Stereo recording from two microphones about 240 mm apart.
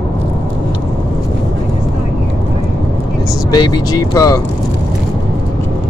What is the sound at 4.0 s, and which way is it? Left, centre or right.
Speech, centre.